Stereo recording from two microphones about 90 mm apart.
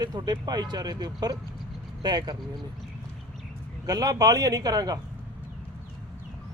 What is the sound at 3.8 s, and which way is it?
Speech, 45° right (ahead or behind).